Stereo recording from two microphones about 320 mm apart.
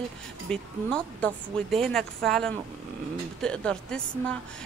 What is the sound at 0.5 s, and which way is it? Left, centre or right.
Speech, centre.